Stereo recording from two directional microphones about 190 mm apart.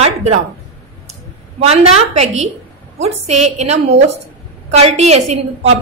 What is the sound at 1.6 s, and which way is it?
A woman's voice, 35° right (ahead or behind).